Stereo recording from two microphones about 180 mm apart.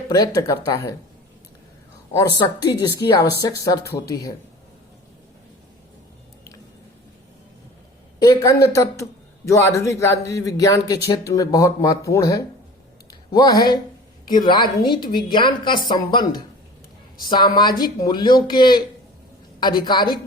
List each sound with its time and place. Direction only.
0.1 s a woman's voice: 20° left (ahead or behind)
2.1 s a woman's voice: 25° left (ahead or behind)
8.2 s a woman's voice: 20° left (ahead or behind)